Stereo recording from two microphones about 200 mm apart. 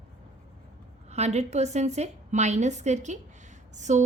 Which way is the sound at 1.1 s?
35° right (ahead or behind).